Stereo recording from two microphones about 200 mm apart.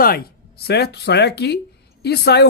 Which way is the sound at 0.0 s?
50° left (ahead or behind).